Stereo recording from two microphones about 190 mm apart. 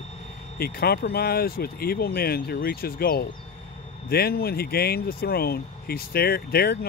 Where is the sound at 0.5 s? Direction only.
55° left (ahead or behind).